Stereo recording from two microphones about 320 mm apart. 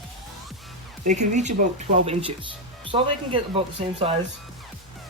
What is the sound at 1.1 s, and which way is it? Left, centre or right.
Speech, right.